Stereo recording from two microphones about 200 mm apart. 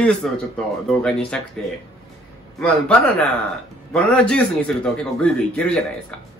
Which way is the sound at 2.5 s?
5° left (ahead or behind).